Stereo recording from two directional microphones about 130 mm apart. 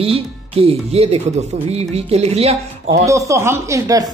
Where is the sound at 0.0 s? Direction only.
45° right (ahead or behind).